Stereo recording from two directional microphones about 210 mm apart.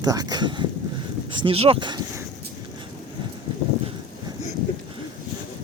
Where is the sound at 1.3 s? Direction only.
25° right (ahead or behind).